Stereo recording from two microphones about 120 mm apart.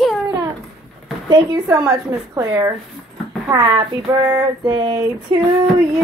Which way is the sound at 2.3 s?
30° right (ahead or behind).